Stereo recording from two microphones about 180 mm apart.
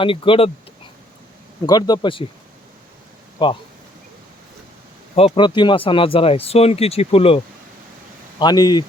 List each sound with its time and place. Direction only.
0.0 s speech: 30° left (ahead or behind)
1.6 s speech: 20° left (ahead or behind)
3.3 s speech: 25° left (ahead or behind)
5.1 s speech: 30° left (ahead or behind)
8.4 s speech: 20° left (ahead or behind)